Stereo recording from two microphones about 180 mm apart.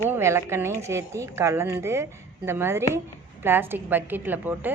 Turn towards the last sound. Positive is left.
turn(degrees=-10)  # may be behind; listen again after turning